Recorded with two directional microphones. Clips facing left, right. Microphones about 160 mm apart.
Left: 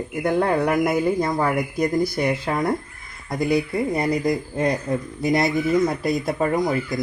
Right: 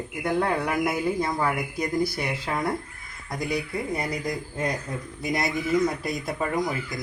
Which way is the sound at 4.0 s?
30° left (ahead or behind).